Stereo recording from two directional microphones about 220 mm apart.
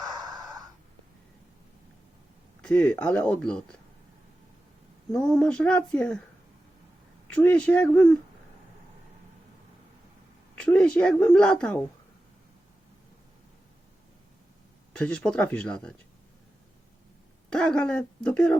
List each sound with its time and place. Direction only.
0.3 s a sound: 15° right (ahead or behind)
2.6 s speech: 5° left (ahead or behind)
5.1 s speech: 5° left (ahead or behind)
7.3 s speech: 5° left (ahead or behind)
10.6 s speech: 5° left (ahead or behind)
14.9 s speech: 5° left (ahead or behind)
17.5 s speech: 5° left (ahead or behind)